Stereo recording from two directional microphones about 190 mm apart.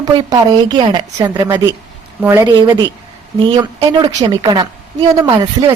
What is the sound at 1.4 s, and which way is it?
Speech, 15° right (ahead or behind).